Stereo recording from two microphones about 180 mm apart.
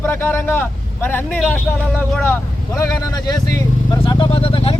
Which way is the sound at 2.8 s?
20° left (ahead or behind).